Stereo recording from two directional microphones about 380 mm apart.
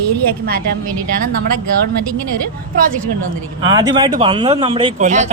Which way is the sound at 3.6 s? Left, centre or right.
Centre.